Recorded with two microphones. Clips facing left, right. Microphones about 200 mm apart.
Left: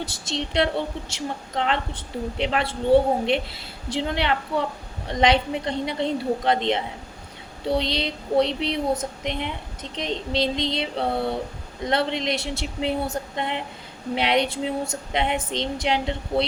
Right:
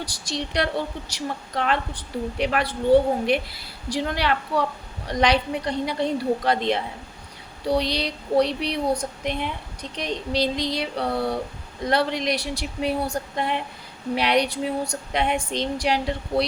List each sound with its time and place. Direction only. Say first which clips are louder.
0.0 s a woman's voice: left 1 dB; 25° left (ahead or behind)